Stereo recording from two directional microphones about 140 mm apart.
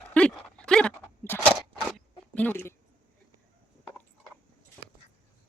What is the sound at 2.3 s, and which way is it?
Speech, 10° left (ahead or behind).